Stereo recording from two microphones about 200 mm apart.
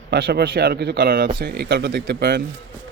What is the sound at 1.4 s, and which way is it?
Speech, 60° right (ahead or behind).